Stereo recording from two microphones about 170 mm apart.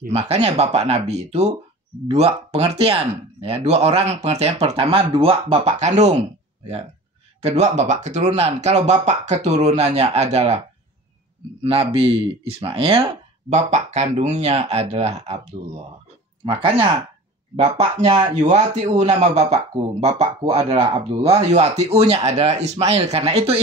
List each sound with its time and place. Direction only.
0.0 s speech: 40° right (ahead or behind)
7.4 s speech: 40° right (ahead or behind)
11.6 s speech: 35° right (ahead or behind)
16.4 s speech: 30° right (ahead or behind)